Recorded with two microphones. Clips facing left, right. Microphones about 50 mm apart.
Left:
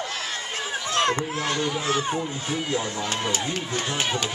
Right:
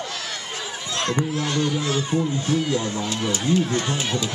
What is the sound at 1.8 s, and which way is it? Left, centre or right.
Speech, left.